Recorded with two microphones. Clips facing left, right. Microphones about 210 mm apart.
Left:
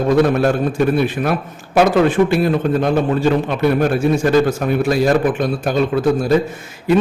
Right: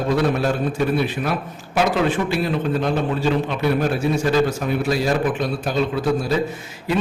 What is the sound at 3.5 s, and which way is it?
A man's voice, 50° left (ahead or behind).